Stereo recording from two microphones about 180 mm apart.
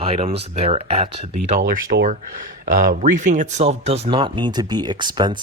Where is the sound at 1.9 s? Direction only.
60° right (ahead or behind).